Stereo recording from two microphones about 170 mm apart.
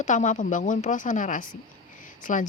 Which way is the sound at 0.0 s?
45° left (ahead or behind).